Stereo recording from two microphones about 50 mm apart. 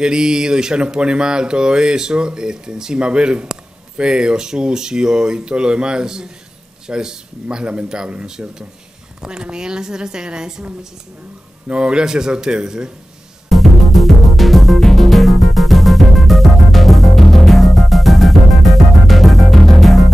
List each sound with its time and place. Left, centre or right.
0.0 s speech: centre
13.5 s music: centre